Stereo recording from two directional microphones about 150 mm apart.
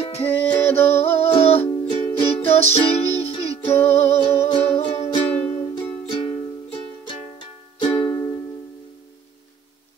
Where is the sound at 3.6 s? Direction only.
15° left (ahead or behind).